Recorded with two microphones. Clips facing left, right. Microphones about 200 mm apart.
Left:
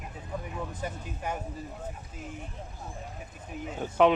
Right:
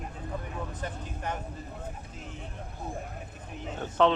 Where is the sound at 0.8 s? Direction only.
10° left (ahead or behind).